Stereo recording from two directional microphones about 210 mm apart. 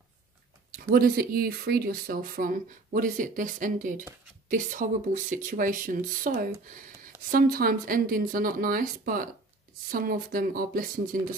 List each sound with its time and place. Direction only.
0.9 s speech: 45° right (ahead or behind)